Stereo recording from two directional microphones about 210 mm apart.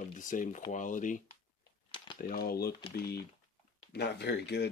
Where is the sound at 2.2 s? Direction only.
45° left (ahead or behind).